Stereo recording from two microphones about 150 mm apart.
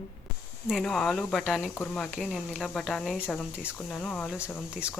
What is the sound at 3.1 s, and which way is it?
Speech, 15° left (ahead or behind).